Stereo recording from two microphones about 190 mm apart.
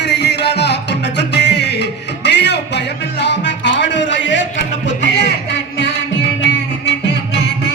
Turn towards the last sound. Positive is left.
turn(degrees=65)  # may be behind; listen again after turning